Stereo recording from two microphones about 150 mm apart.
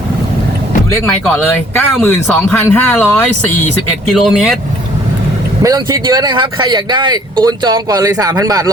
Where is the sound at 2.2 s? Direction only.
15° left (ahead or behind).